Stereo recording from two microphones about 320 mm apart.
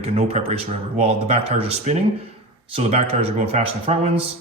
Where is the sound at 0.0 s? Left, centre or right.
Centre.